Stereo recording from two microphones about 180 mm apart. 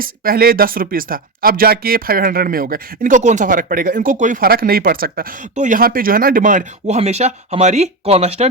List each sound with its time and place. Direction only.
0.0 s speech: 55° right (ahead or behind); by 8.4 s 35° right (ahead or behind)